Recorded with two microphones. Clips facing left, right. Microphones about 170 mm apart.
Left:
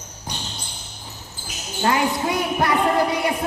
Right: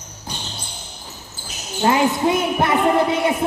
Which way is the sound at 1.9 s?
25° right (ahead or behind).